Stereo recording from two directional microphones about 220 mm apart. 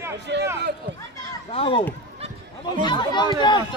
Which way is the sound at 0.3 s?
50° right (ahead or behind).